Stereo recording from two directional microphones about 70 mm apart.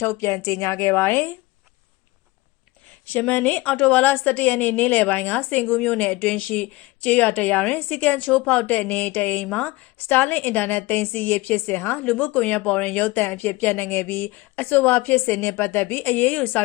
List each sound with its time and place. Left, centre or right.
0.0 s speech: left
3.1 s a woman's voice: left
9.5 s a woman's voice: centre